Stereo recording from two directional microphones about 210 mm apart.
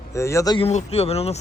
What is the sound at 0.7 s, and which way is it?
Speech, 30° left (ahead or behind).